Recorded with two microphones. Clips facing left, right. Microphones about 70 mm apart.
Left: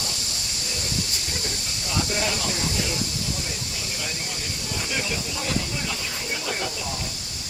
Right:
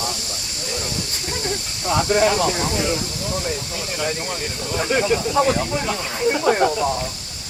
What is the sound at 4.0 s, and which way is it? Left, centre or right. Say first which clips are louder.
Speech: right 11 dB; right.